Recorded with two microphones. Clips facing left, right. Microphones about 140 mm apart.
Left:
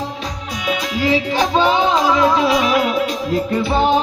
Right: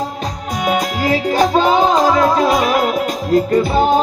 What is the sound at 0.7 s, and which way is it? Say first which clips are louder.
Music: right 1 dB; 45° right (ahead or behind).